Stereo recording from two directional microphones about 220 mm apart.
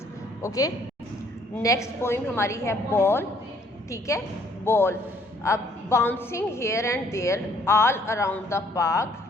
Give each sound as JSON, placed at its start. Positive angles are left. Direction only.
{"t": 0.4, "sound": "a woman's voice", "side_deg": 15}